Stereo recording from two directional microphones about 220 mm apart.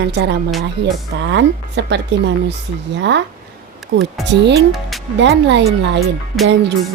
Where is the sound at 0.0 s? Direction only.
50° right (ahead or behind).